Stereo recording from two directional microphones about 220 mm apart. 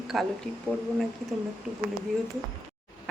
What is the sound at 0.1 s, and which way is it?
Speech, centre (ahead or behind).